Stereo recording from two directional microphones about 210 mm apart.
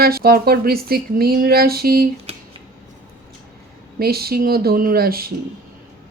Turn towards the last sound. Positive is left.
turn(degrees=-45)  # may be behind; listen again after turning